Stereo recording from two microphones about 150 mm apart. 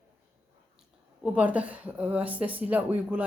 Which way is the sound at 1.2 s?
10° right (ahead or behind).